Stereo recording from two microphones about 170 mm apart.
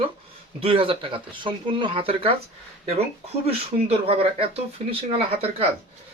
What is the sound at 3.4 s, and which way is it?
Speech, 35° right (ahead or behind).